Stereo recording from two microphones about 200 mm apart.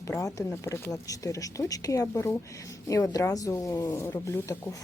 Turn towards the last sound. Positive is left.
turn(degrees=15)  # may be behind; listen again after turning